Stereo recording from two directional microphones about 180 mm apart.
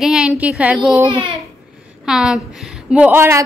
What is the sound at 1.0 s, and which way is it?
Speech, 30° right (ahead or behind).